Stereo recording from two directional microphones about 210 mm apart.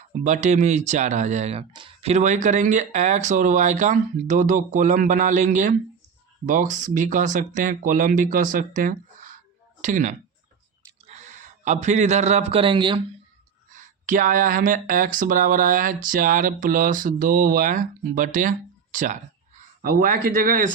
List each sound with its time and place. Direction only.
0.3 s a man's voice: 35° right (ahead or behind)
13.7 s speech: 40° right (ahead or behind)